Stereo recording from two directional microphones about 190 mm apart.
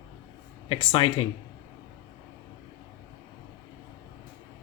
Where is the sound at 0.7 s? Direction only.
25° left (ahead or behind).